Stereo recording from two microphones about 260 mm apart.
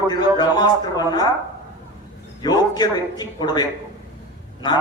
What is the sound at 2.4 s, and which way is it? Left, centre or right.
A man's voice, centre.